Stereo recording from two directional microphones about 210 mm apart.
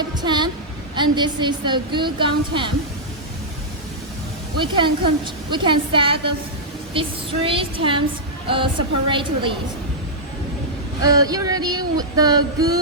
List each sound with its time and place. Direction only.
0.2 s a woman's voice: 20° right (ahead or behind)
4.6 s a woman's voice: 25° right (ahead or behind)
11.0 s a sound: 15° right (ahead or behind)